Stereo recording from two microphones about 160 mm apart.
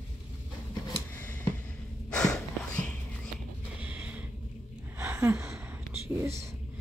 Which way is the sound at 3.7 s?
10° right (ahead or behind).